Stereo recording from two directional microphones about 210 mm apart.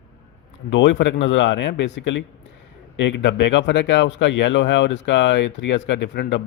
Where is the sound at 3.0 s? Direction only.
60° left (ahead or behind).